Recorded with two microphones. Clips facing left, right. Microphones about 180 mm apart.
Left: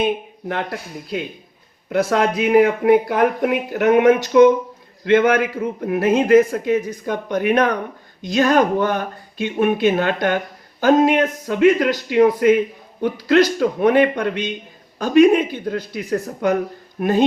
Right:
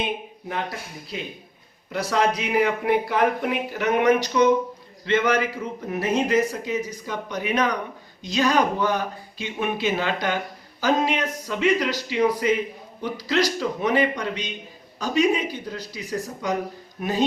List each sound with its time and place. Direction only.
0.0 s a man's voice: 60° left (ahead or behind)